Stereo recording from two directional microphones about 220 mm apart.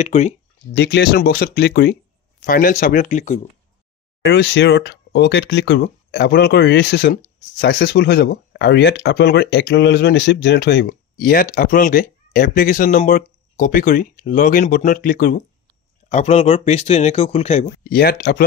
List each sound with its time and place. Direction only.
0.0 s speech: 30° left (ahead or behind)
0.7 s speech: 50° left (ahead or behind)
4.2 s speech: 50° left (ahead or behind); by 17.6 s 30° left (ahead or behind)
17.8 s speech: 45° left (ahead or behind)